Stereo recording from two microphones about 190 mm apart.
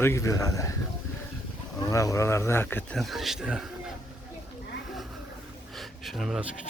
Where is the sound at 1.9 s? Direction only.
15° left (ahead or behind).